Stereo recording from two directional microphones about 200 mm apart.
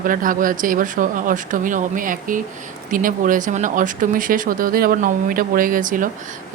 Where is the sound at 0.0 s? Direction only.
45° right (ahead or behind).